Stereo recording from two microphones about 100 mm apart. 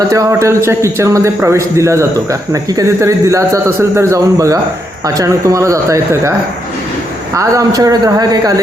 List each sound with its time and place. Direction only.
0.1 s speech: 35° right (ahead or behind)
7.3 s speech: 35° right (ahead or behind)